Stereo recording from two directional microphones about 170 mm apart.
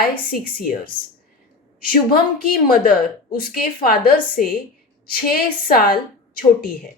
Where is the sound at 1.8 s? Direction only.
60° left (ahead or behind).